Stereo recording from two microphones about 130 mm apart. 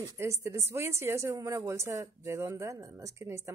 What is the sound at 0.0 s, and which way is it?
Speech, 20° right (ahead or behind).